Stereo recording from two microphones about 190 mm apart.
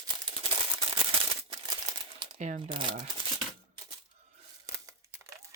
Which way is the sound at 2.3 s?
45° right (ahead or behind).